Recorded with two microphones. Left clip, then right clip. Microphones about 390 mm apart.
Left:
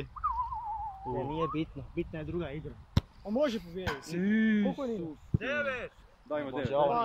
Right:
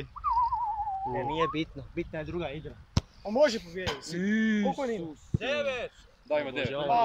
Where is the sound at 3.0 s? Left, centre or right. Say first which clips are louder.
Right 2 dB; centre.